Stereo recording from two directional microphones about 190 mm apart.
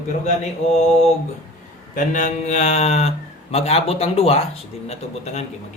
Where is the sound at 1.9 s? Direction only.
45° left (ahead or behind).